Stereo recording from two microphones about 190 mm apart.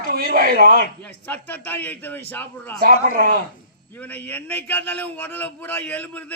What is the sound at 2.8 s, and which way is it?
Speech, 45° right (ahead or behind).